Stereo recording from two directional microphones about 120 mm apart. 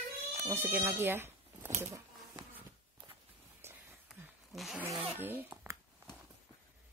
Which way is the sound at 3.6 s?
20° right (ahead or behind).